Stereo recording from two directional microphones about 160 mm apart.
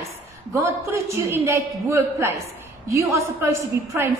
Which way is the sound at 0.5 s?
15° right (ahead or behind).